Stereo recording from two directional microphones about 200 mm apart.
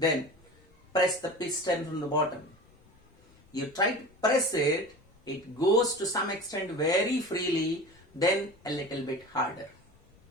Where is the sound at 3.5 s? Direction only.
20° left (ahead or behind).